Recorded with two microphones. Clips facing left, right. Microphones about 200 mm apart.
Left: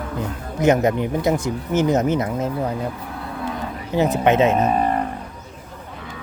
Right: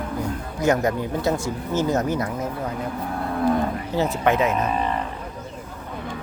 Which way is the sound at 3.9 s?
20° left (ahead or behind).